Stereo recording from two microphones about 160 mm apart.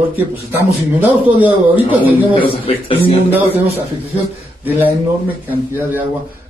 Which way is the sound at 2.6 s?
35° left (ahead or behind).